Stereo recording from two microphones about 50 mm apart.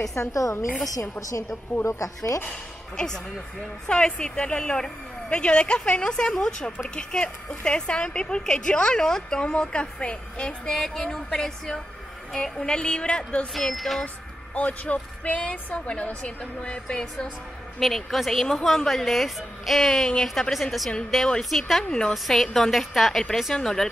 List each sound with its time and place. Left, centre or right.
0.1 s speech: left
1.9 s speech: left
3.8 s a woman's voice: centre
13.5 s a woman's voice: centre
14.0 s a woman's voice: left
17.7 s a woman's voice: centre